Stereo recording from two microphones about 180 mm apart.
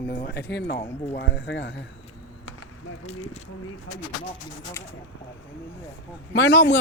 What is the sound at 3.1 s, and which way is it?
Speech, 40° left (ahead or behind).